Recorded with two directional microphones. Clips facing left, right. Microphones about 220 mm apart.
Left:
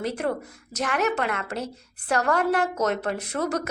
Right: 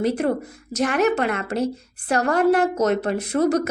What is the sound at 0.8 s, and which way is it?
A woman's voice, 25° right (ahead or behind).